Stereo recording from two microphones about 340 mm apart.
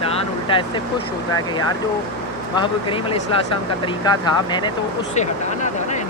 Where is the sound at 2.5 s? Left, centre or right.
Centre.